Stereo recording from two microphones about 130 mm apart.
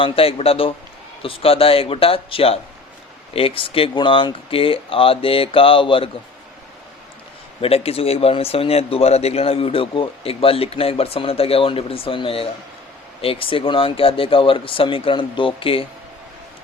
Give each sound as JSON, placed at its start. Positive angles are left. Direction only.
{"t": 0.0, "sound": "speech", "side_deg": 50}
{"t": 7.6, "sound": "speech", "side_deg": 50}